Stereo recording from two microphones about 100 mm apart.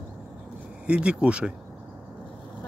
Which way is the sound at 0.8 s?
10° right (ahead or behind).